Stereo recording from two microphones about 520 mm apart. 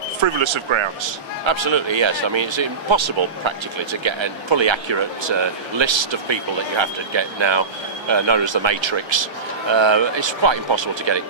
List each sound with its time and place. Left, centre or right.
0.2 s speech: right